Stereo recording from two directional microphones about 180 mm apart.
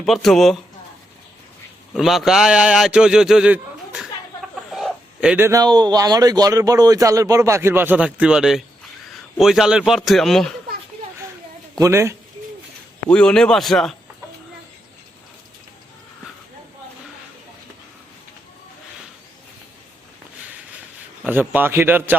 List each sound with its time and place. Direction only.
0.0 s a man's voice: centre (ahead or behind)
1.9 s a man's voice: centre (ahead or behind)
4.7 s a sound: 5° right (ahead or behind)
5.5 s a man's voice: 20° right (ahead or behind); by 10.5 s centre (ahead or behind)
11.8 s speech: 15° right (ahead or behind)
13.1 s a man's voice: 5° left (ahead or behind)
21.2 s speech: 10° right (ahead or behind)